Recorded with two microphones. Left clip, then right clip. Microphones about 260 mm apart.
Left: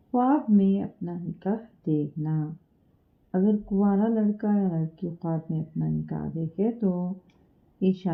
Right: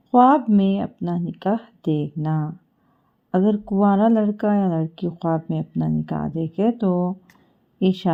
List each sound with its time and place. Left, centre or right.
0.1 s speech: right